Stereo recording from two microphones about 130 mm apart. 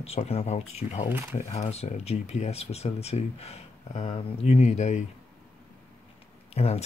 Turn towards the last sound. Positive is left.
turn(degrees=50)  # may be behind; listen again after turning